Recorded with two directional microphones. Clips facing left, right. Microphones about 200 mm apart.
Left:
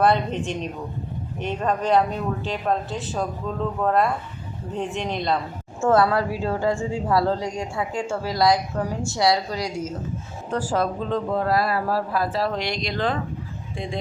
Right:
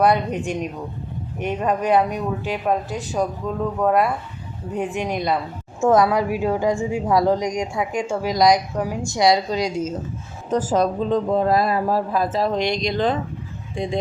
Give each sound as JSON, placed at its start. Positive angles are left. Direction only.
{"t": 0.0, "sound": "a woman's voice", "side_deg": -15}
{"t": 1.8, "sound": "a woman's voice", "side_deg": -15}